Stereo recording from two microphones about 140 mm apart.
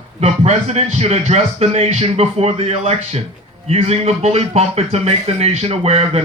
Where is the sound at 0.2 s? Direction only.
50° right (ahead or behind).